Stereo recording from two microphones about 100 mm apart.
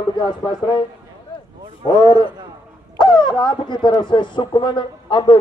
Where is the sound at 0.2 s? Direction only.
50° left (ahead or behind).